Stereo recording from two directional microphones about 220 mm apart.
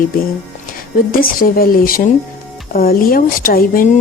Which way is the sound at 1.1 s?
40° left (ahead or behind).